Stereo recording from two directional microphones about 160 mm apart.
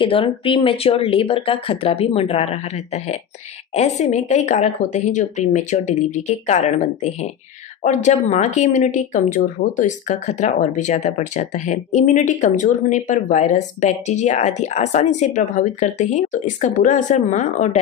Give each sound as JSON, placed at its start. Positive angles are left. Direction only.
{"t": 0.0, "sound": "speech", "side_deg": 35}